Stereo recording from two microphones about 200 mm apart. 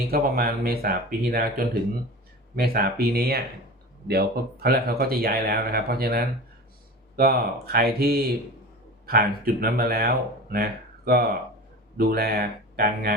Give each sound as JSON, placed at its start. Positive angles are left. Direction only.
{"t": 0.1, "sound": "speech", "side_deg": -50}